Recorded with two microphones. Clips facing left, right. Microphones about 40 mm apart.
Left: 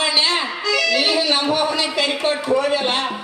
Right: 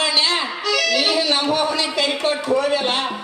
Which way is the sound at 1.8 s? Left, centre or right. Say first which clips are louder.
Even; centre.